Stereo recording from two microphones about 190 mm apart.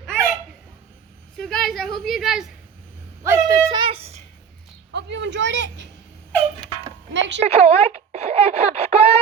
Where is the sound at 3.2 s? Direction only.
15° right (ahead or behind); by 4.2 s 35° right (ahead or behind).